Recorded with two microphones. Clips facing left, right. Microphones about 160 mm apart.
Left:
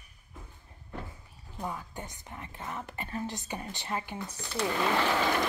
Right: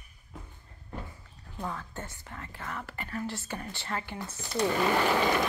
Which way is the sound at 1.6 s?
15° left (ahead or behind).